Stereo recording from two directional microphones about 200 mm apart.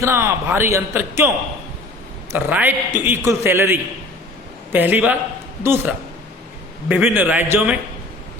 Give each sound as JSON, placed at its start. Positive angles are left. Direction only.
{"t": 0.0, "sound": "a man's voice", "side_deg": -15}
{"t": 2.3, "sound": "a man's voice", "side_deg": -10}